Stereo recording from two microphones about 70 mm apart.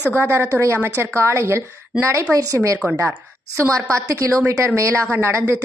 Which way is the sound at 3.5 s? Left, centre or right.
Right.